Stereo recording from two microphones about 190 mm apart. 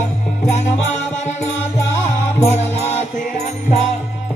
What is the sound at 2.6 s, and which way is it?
Music, 35° left (ahead or behind).